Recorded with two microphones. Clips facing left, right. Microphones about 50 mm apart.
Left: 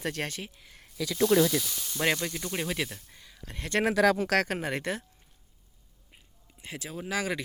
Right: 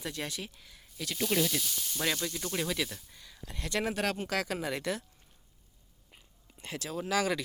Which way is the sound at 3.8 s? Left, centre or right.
Left.